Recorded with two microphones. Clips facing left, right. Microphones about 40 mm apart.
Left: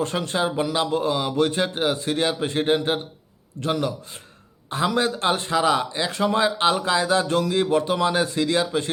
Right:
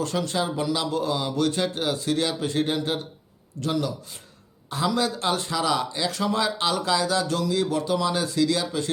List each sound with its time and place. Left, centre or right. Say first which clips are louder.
0.0 s speech: left 2 dB; left